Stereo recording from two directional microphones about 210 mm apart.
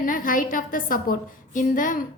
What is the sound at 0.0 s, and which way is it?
A woman's voice, 40° left (ahead or behind).